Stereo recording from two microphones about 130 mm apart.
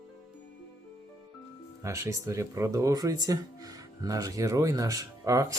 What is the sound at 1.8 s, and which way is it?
Speech, 20° right (ahead or behind).